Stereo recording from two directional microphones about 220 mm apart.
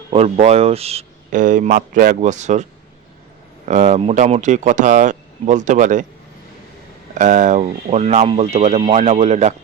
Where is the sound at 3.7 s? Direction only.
35° right (ahead or behind).